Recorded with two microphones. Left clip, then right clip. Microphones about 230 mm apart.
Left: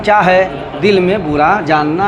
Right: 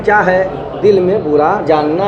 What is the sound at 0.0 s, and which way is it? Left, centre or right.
A man's voice, left.